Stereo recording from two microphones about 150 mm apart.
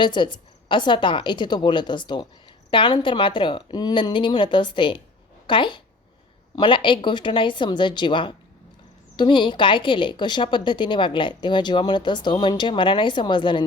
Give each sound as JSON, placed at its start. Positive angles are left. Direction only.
{"t": 0.0, "sound": "a woman's voice", "side_deg": 30}